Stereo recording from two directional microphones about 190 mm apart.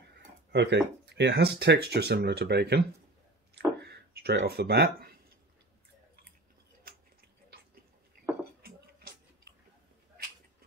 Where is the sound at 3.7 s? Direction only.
60° right (ahead or behind).